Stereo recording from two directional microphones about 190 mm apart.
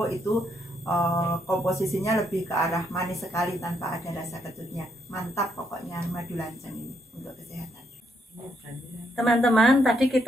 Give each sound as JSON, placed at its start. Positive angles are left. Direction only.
{"t": 0.0, "sound": "a woman's voice", "side_deg": 15}
{"t": 9.1, "sound": "a woman's voice", "side_deg": 0}